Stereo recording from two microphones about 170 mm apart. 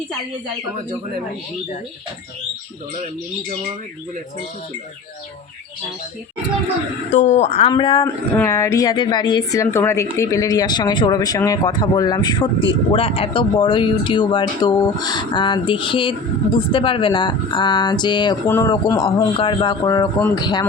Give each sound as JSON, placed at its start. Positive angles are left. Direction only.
{"t": 7.1, "sound": "a woman's voice", "side_deg": 45}
{"t": 7.7, "sound": "a woman's voice", "side_deg": 30}
{"t": 8.0, "sound": "a woman's voice", "side_deg": 15}
{"t": 18.4, "sound": "a woman's voice", "side_deg": 15}
{"t": 19.0, "sound": "a woman's voice", "side_deg": 30}